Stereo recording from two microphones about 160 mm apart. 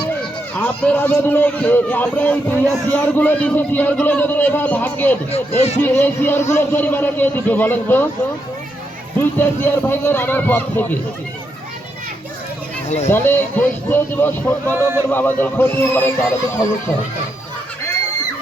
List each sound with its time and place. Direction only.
0.5 s speech: 10° left (ahead or behind)
5.3 s speech: 40° left (ahead or behind)
5.8 s speech: 15° left (ahead or behind)
9.8 s speech: 15° left (ahead or behind)
12.9 s speech: 45° left (ahead or behind)
13.1 s speech: 15° left (ahead or behind)
14.7 s a man's voice: 15° right (ahead or behind)
15.1 s speech: 10° left (ahead or behind)